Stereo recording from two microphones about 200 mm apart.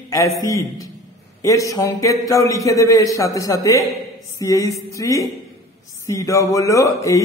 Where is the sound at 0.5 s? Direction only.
15° left (ahead or behind).